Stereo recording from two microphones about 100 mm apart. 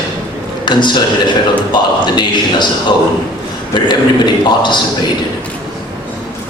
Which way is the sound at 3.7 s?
50° left (ahead or behind).